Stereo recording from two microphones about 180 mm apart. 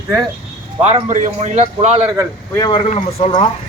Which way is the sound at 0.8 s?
40° right (ahead or behind).